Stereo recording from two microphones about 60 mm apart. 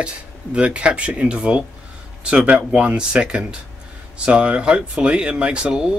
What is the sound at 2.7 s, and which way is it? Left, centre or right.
Speech, centre.